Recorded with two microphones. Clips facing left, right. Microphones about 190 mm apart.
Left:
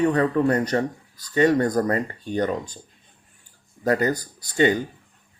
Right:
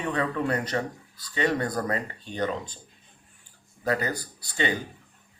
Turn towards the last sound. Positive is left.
turn(degrees=45)  # may be behind; listen again after turning